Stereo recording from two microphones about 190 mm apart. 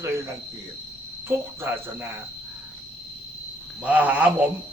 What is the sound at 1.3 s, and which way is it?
Speech, 10° right (ahead or behind).